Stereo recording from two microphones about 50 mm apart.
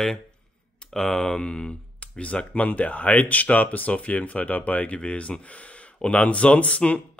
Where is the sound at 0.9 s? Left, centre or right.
Centre.